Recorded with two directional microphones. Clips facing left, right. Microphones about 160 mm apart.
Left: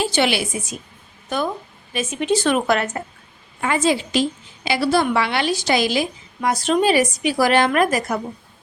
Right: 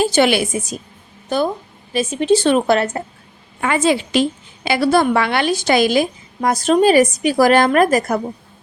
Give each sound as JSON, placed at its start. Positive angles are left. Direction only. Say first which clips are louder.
{"t": 0.0, "sound": "a woman's voice", "louder": "right 5 dB", "side_deg": -45}
{"t": 1.3, "sound": "a woman's voice", "louder": "right 5 dB", "side_deg": -30}
{"t": 3.6, "sound": "a woman's voice", "louder": "right 3 dB", "side_deg": -65}